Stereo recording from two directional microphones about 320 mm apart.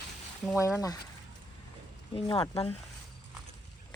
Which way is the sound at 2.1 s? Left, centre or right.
Centre.